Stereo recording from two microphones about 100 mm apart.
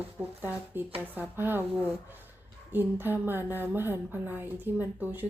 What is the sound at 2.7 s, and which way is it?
Speech, 20° right (ahead or behind).